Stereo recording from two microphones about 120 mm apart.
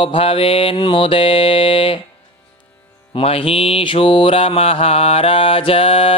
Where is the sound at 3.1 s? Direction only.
50° left (ahead or behind).